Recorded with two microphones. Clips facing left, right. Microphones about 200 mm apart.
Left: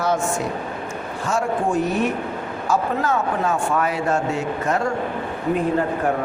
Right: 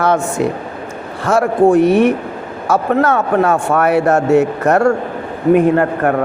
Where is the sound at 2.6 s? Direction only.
85° right.